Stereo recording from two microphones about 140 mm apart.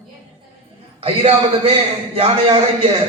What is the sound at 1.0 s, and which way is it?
Speech, 45° right (ahead or behind).